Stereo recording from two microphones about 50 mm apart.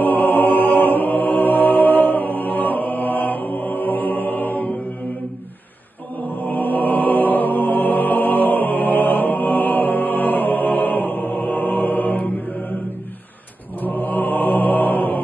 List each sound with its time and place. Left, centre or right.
0.0 s music: left
6.3 s music: left
13.7 s mantra: left